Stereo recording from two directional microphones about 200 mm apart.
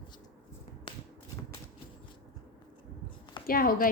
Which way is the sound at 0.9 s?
25° left (ahead or behind).